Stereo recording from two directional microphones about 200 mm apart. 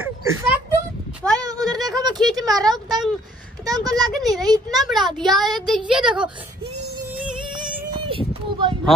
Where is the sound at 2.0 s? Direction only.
20° right (ahead or behind).